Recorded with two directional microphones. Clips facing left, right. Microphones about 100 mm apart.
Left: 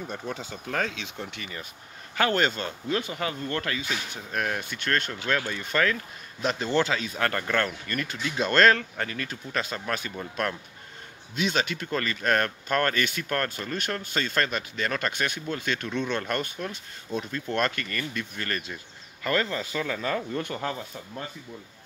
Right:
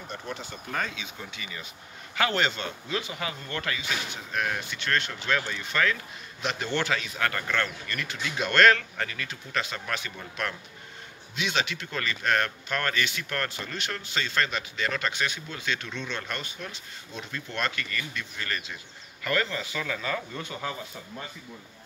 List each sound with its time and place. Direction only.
0.7 s speech: 85° left
1.4 s speech: 45° left (ahead or behind)
11.3 s speech: 40° left (ahead or behind)
19.2 s speech: 30° left (ahead or behind)